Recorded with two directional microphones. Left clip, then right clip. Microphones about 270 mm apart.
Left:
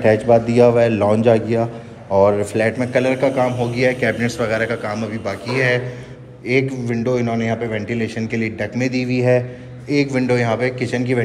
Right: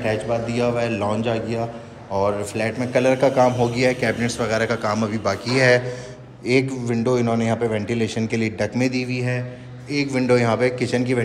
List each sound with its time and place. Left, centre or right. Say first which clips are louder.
0.0 s a man's voice: left 9 dB; centre